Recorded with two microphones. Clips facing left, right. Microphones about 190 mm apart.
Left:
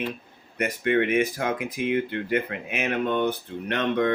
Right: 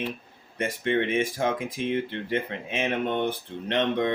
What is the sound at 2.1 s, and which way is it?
Speech, 25° right (ahead or behind).